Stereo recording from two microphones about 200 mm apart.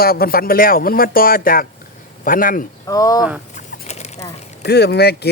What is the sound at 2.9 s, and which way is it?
Speech, 15° left (ahead or behind).